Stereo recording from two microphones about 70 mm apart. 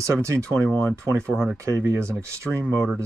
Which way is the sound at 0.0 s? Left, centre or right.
Right.